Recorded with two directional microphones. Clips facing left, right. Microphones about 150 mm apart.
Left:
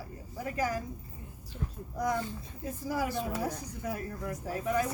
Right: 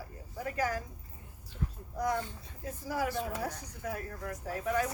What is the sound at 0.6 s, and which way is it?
Speech, 15° left (ahead or behind).